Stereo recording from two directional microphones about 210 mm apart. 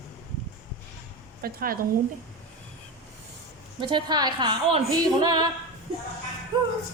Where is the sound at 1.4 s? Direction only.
45° right (ahead or behind).